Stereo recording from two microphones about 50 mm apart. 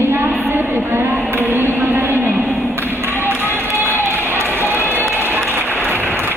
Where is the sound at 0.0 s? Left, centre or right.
Right.